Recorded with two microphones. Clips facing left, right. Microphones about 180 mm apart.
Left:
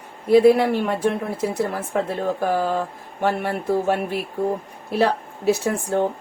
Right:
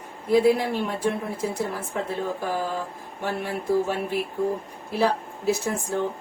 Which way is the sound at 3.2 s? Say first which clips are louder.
Left 5 dB; 65° left (ahead or behind).